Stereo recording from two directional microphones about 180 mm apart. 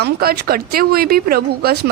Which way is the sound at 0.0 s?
60° right (ahead or behind).